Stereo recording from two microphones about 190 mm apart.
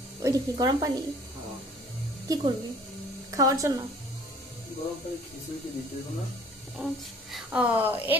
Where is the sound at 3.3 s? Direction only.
15° right (ahead or behind).